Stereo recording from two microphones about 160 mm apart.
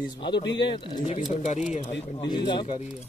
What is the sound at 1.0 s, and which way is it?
Speech, 45° left (ahead or behind).